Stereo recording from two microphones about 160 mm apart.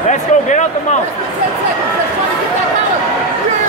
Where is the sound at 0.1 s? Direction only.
50° left (ahead or behind).